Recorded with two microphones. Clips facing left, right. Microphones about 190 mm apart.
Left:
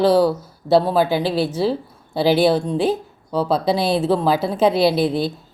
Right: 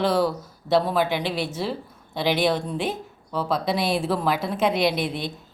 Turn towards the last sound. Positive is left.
turn(degrees=30)  # may be behind; listen again after turning